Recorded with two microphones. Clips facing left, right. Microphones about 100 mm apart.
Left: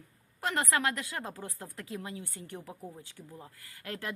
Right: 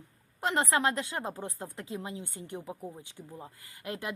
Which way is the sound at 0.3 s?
25° right (ahead or behind).